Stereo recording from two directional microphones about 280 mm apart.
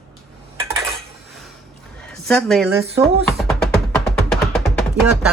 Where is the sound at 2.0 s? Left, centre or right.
Centre.